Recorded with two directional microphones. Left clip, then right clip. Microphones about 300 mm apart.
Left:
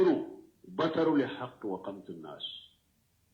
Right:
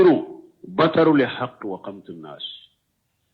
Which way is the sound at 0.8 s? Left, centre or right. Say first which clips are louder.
Right 11 dB; right.